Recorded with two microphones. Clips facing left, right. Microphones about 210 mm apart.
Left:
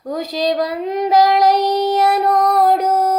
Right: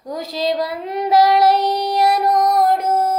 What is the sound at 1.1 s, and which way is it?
Child singing, 20° left (ahead or behind).